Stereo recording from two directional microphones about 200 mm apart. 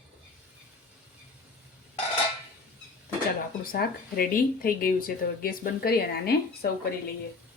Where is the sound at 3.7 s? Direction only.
50° left (ahead or behind).